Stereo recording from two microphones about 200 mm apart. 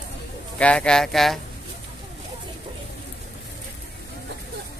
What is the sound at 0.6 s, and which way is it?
Speech, 5° left (ahead or behind).